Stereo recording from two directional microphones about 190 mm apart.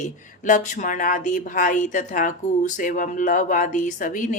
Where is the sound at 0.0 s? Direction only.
40° left (ahead or behind).